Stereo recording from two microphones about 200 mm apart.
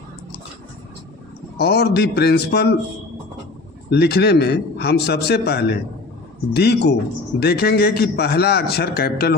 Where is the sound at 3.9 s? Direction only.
55° left (ahead or behind).